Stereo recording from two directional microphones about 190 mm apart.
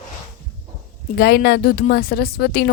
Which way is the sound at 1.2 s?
55° left (ahead or behind).